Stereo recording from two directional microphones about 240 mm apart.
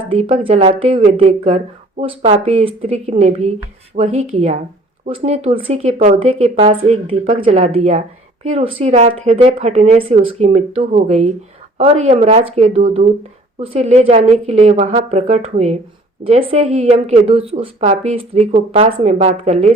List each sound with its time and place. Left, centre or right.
0.1 s speech: right